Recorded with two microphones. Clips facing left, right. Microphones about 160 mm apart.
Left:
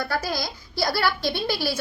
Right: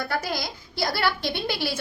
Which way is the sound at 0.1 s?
20° right (ahead or behind).